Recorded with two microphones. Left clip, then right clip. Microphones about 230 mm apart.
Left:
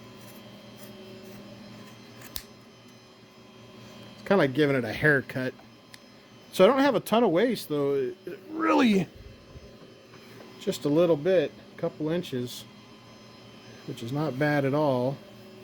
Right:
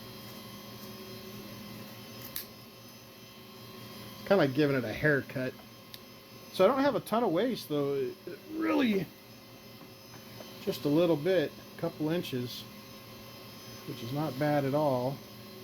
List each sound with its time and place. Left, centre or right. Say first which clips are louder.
4.2 s speech: left 3 dB; left
8.5 s speech: left 6 dB; left
10.7 s speech: left 4 dB; left
14.2 s speech: left 4 dB; left